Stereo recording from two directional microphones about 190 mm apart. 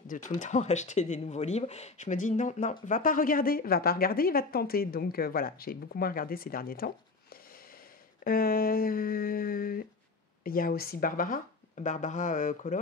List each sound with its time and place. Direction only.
0.4 s a woman's voice: 35° left (ahead or behind)
8.2 s a woman's voice: 50° left (ahead or behind)